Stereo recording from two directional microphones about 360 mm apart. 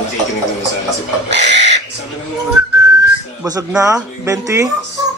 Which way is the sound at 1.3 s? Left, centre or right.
Right.